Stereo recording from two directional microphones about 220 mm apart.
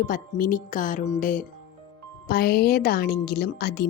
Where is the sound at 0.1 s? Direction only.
40° left (ahead or behind).